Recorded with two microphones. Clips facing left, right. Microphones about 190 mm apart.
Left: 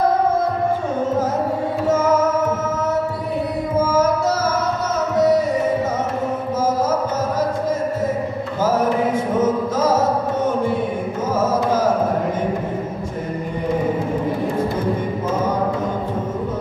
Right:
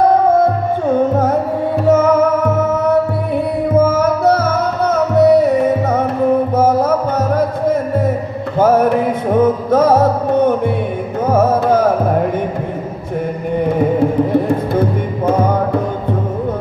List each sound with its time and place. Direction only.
1.9 s music: 60° right (ahead or behind)
3.7 s music: 60° right (ahead or behind)
8.5 s music: 60° right (ahead or behind)